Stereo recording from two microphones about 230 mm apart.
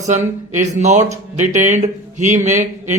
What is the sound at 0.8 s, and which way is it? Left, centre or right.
Speech, right.